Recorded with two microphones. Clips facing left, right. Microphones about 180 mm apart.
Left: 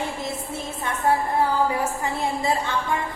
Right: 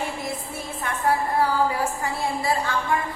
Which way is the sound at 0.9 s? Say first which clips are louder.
Left 1 dB; 20° left (ahead or behind).